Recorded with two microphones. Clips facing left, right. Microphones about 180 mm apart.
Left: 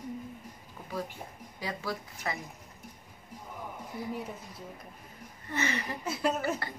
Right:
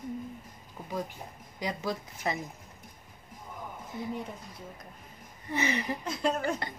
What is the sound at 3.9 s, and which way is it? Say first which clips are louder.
Speech: right 1 dB; 20° right (ahead or behind).